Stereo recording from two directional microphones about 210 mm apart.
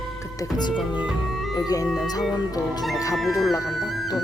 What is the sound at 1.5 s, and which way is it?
Speech, 15° left (ahead or behind).